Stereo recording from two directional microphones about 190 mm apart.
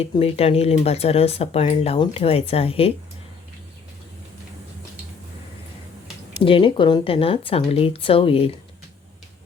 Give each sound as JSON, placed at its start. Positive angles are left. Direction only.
{"t": 0.0, "sound": "speech", "side_deg": 30}
{"t": 6.4, "sound": "speech", "side_deg": 25}